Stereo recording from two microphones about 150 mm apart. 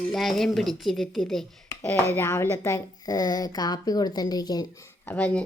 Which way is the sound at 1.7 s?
15° left (ahead or behind).